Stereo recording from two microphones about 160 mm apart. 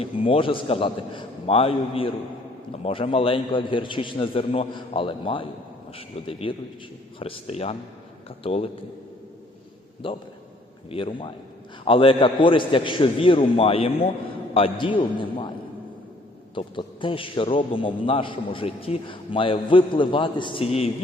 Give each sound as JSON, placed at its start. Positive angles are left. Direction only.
{"t": 0.0, "sound": "a man's voice", "side_deg": 35}
{"t": 10.0, "sound": "a man's voice", "side_deg": 35}
{"t": 16.6, "sound": "a man's voice", "side_deg": 30}